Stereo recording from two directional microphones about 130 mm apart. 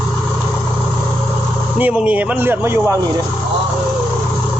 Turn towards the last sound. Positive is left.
turn(degrees=-20)  # may be behind; listen again after turning